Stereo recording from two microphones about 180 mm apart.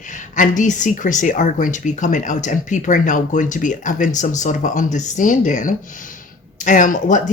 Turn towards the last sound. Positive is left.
turn(degrees=45)  # may be behind; listen again after turning